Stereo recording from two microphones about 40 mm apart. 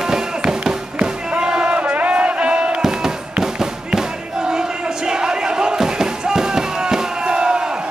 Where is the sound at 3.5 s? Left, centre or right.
Centre.